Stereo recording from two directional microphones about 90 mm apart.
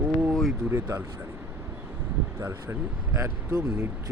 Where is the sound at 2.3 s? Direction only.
25° right (ahead or behind).